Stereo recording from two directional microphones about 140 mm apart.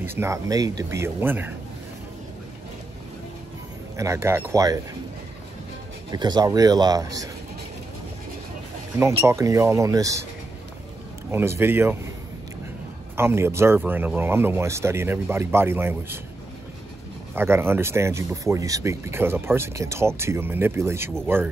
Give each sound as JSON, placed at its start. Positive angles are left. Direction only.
{"t": 0.0, "sound": "speech", "side_deg": -15}
{"t": 3.9, "sound": "speech", "side_deg": -20}
{"t": 6.0, "sound": "speech", "side_deg": -30}
{"t": 9.0, "sound": "speech", "side_deg": -20}
{"t": 11.3, "sound": "speech", "side_deg": -15}
{"t": 13.1, "sound": "speech", "side_deg": -15}
{"t": 17.4, "sound": "speech", "side_deg": -15}